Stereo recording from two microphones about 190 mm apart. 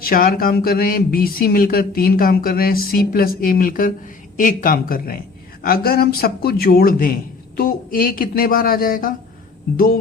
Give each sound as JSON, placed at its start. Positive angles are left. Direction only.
{"t": 0.0, "sound": "speech", "side_deg": 50}